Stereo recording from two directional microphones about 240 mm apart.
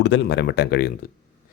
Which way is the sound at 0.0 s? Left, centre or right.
Left.